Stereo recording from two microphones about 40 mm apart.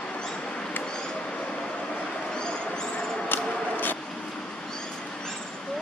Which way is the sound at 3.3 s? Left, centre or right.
Left.